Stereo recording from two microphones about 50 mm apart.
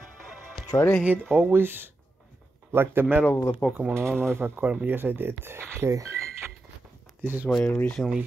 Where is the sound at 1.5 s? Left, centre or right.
Right.